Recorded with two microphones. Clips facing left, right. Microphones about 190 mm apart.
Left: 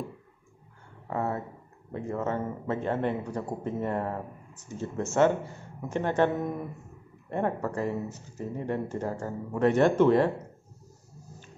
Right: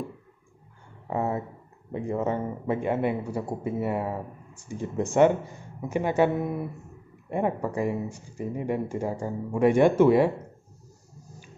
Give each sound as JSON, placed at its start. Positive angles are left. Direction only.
{"t": 1.1, "sound": "speech", "side_deg": -15}